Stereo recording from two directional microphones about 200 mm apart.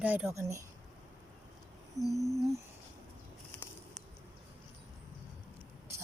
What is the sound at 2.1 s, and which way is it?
Speech, 15° right (ahead or behind).